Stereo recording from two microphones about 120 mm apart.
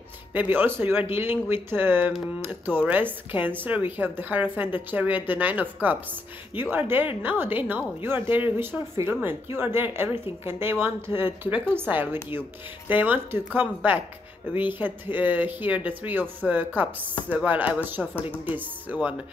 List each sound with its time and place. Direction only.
0.3 s a woman's voice: 15° right (ahead or behind)
7.2 s a woman's voice: 15° right (ahead or behind)